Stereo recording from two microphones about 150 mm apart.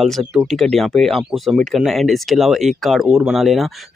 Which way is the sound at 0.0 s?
Centre (ahead or behind).